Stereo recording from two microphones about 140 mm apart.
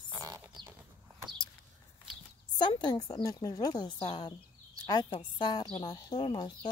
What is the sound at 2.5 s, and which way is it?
A woman's voice, 30° left (ahead or behind).